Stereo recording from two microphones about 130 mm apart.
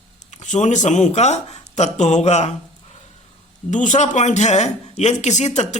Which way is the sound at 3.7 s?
75° left (ahead or behind).